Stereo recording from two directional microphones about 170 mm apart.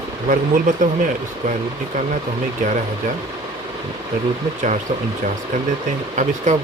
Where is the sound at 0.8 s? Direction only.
50° right (ahead or behind).